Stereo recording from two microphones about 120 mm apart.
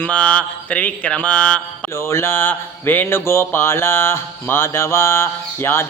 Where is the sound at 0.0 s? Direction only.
10° left (ahead or behind).